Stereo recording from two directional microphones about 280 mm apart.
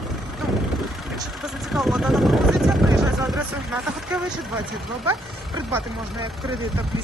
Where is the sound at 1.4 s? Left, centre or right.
Centre.